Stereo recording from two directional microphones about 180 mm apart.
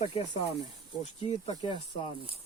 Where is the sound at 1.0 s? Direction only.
30° left (ahead or behind).